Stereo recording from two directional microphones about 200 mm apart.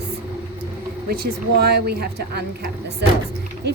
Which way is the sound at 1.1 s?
50° right (ahead or behind).